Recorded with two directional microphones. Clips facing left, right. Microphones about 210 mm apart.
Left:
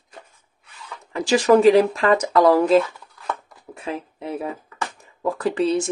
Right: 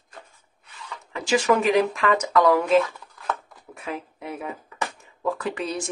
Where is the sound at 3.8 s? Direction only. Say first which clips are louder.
Left 3 dB; 30° left (ahead or behind).